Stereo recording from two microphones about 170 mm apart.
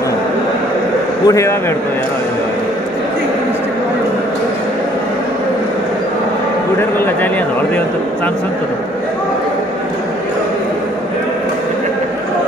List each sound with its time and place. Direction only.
1.2 s a man's voice: 20° left (ahead or behind)